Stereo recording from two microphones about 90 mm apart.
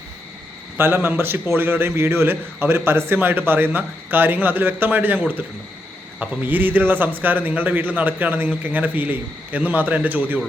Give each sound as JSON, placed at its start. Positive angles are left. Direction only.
{"t": 0.8, "sound": "a man's voice", "side_deg": -25}